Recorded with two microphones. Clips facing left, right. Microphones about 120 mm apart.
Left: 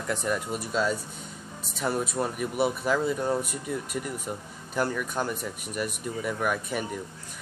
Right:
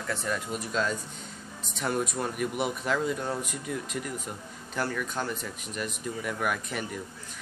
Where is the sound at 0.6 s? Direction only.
5° left (ahead or behind).